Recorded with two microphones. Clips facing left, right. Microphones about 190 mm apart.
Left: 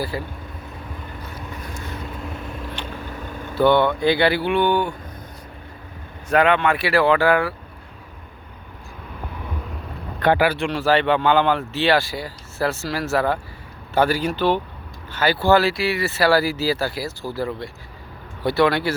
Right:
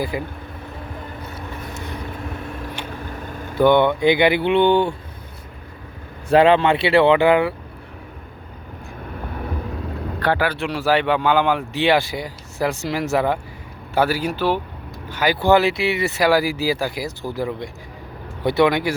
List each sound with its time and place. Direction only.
0.0 s speech: 15° right (ahead or behind)
2.8 s vehicle: 10° right (ahead or behind)
3.5 s speech: 15° right (ahead or behind)
6.2 s speech: 30° right (ahead or behind)
10.2 s speech: 15° left (ahead or behind)
10.6 s speech: 10° right (ahead or behind)